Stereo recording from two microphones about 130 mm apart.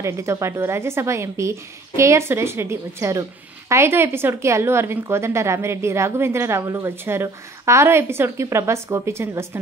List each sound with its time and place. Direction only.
0.0 s a woman's voice: 20° right (ahead or behind)